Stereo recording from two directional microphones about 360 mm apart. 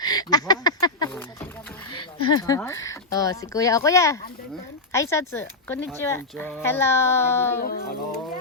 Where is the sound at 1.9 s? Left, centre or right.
Left.